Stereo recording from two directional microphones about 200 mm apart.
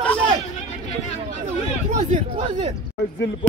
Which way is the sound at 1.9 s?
30° right (ahead or behind).